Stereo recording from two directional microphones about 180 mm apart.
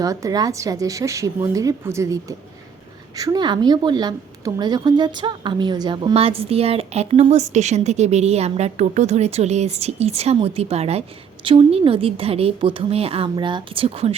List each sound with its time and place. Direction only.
0.0 s a woman's voice: 20° right (ahead or behind)